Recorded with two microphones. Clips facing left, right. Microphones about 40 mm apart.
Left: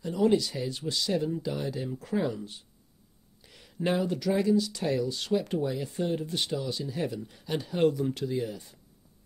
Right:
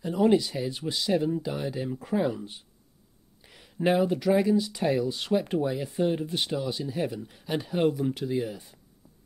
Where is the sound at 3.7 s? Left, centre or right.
Centre.